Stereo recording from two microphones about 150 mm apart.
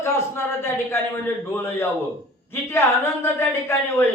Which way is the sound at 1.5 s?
15° left (ahead or behind).